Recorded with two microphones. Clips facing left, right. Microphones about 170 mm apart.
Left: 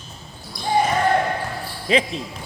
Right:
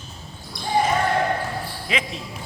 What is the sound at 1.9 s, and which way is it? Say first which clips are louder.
Speech: left 8 dB; 35° left (ahead or behind).